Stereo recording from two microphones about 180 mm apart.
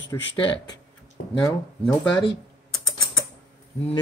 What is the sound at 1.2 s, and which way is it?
Speech, 65° left (ahead or behind).